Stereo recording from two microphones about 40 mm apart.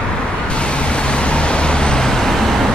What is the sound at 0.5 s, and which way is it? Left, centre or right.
Vehicle, left.